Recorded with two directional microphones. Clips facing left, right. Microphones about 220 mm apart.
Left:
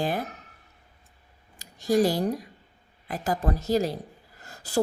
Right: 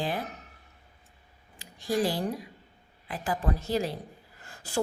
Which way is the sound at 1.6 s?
45° left (ahead or behind).